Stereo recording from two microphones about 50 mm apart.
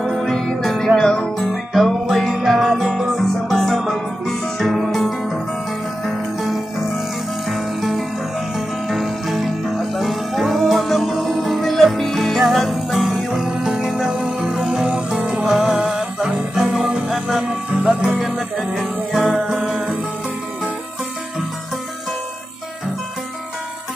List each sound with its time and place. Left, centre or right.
0.0 s music: centre
17.1 s music: centre